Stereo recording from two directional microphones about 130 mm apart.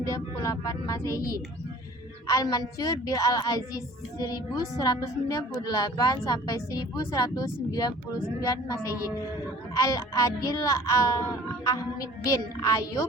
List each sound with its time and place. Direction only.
0.0 s a woman's voice: 25° left (ahead or behind)
2.2 s a woman's voice: 30° left (ahead or behind)